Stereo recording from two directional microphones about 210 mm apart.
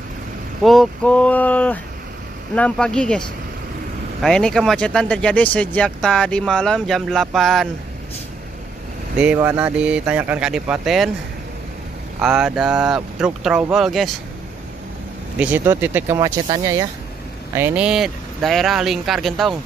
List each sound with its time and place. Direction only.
0.6 s speech: centre (ahead or behind)
9.2 s speech: 5° right (ahead or behind)
12.2 s speech: 5° right (ahead or behind)
15.3 s speech: 10° right (ahead or behind)
17.6 s speech: 10° right (ahead or behind)